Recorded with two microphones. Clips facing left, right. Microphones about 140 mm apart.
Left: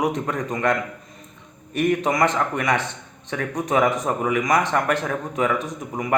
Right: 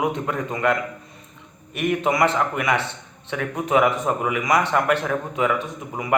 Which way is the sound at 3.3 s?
40° left (ahead or behind).